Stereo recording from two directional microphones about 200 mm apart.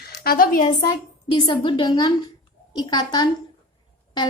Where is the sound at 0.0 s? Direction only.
50° left (ahead or behind).